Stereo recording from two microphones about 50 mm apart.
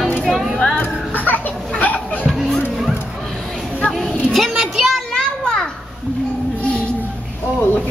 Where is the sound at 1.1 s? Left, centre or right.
Left.